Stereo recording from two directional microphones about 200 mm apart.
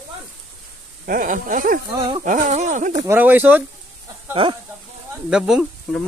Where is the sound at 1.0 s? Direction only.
45° right (ahead or behind).